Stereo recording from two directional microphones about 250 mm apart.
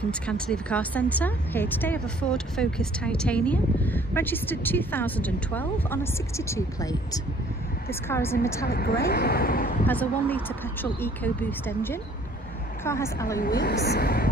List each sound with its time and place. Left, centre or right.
0.1 s speech: centre
8.6 s a woman's voice: left
9.8 s speech: centre
13.4 s a woman's voice: left